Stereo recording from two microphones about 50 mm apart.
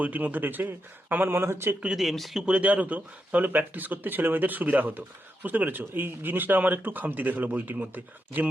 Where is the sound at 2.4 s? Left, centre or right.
Right.